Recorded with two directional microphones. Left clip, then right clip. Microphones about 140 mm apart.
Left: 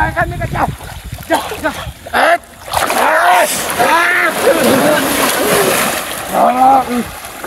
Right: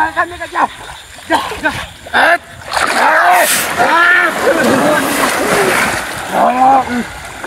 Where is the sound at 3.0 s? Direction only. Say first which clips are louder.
Right 1 dB; 40° left (ahead or behind).